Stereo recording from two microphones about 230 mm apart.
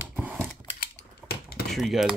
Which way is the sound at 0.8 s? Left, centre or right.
Left.